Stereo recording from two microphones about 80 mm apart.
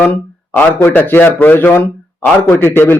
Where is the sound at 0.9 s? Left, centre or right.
Left.